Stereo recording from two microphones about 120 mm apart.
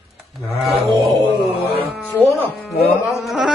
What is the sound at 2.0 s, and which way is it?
Speech, 15° left (ahead or behind).